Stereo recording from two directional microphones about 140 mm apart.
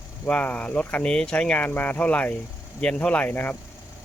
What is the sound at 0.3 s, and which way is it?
Speech, 10° left (ahead or behind).